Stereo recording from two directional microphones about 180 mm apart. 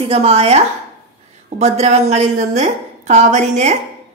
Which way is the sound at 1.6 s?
35° right (ahead or behind).